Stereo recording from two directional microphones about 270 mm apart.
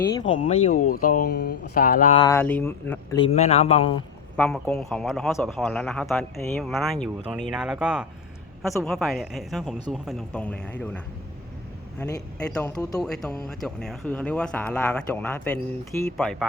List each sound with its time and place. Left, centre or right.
0.3 s speech: centre
2.1 s a man's voice: centre
4.4 s a man's voice: centre